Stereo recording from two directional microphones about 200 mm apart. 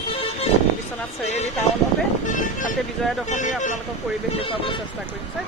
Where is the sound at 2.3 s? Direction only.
40° left (ahead or behind).